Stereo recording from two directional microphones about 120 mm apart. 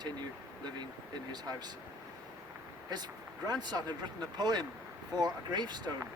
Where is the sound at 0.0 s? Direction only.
35° right (ahead or behind).